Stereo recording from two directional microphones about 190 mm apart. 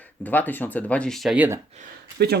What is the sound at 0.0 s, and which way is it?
Speech, 10° left (ahead or behind).